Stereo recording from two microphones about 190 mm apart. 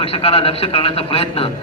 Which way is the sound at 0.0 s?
30° left (ahead or behind).